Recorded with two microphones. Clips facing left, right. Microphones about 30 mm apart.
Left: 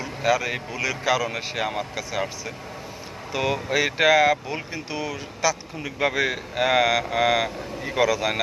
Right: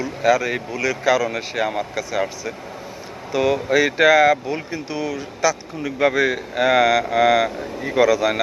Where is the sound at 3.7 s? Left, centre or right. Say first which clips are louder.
Right 4 dB; centre.